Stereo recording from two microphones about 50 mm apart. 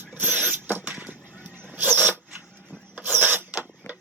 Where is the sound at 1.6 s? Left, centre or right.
Right.